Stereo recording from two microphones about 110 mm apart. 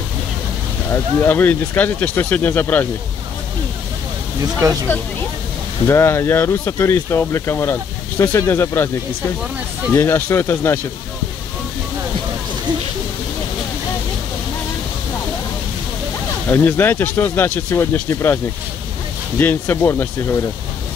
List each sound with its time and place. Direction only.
0.9 s speech: 20° left (ahead or behind)
5.9 s speech: 25° left (ahead or behind)
9.9 s speech: 20° left (ahead or behind)
16.4 s speech: 20° left (ahead or behind)